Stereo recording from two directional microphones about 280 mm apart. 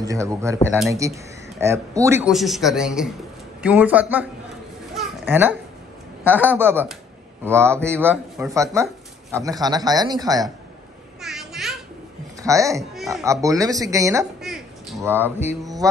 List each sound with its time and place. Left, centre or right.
0.0 s speech: centre
0.9 s speech: centre
4.9 s a sound: centre
6.5 s speech: centre
11.1 s babbling: centre
12.4 s speech: centre
14.4 s a sound: centre
15.4 s speech: centre